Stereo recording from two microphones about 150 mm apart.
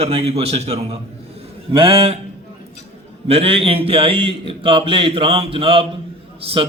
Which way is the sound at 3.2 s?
40° right (ahead or behind).